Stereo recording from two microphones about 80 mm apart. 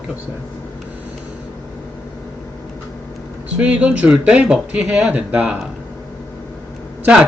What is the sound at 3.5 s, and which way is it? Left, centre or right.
Speech, centre.